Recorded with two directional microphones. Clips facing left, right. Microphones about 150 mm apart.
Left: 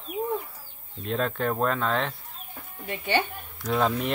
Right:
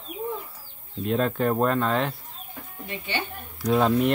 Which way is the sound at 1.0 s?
Centre (ahead or behind).